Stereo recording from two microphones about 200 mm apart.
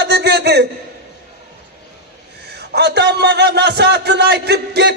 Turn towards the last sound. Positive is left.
turn(degrees=-55)  # may be behind; listen again after turning